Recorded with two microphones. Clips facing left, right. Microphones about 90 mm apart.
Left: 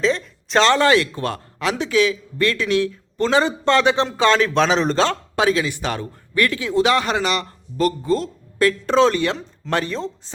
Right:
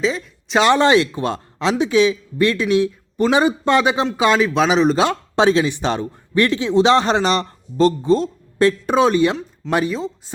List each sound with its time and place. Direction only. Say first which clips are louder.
0.0 s speech: left 1 dB; 5° right (ahead or behind)
0.6 s a man's voice: right 2 dB; 20° right (ahead or behind)
5.4 s speech: right 4 dB; 25° right (ahead or behind); by 10.3 s 10° right (ahead or behind)